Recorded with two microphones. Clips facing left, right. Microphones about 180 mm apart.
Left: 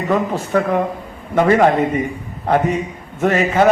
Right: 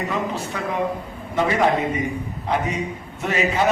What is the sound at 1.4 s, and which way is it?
Speech, 60° left (ahead or behind).